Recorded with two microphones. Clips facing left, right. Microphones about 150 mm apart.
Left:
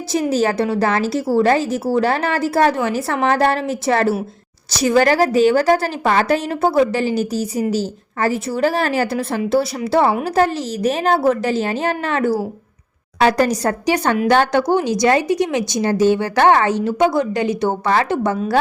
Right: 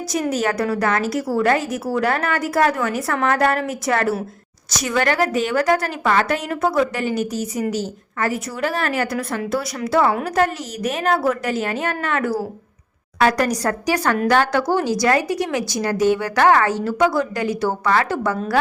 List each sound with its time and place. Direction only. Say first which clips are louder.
0.1 s a woman's voice: left 4 dB; 30° left (ahead or behind)